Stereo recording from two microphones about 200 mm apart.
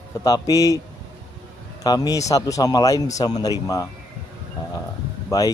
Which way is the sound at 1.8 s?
20° left (ahead or behind).